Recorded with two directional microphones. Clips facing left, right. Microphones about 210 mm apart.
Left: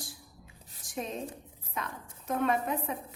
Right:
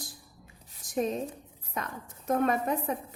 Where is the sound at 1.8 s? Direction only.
40° right (ahead or behind).